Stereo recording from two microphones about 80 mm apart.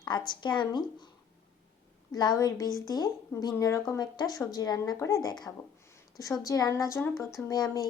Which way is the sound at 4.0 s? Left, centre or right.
Left.